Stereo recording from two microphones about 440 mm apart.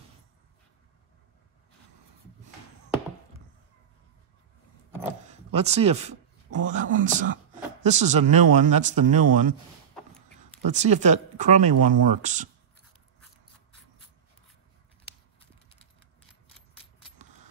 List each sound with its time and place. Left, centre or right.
5.5 s speech: centre
10.7 s speech: centre